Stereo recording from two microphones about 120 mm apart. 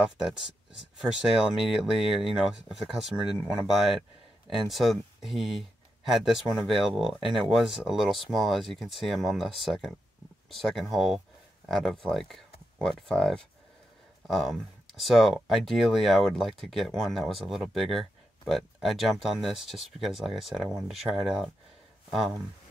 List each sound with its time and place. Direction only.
0.0 s speech: 5° right (ahead or behind)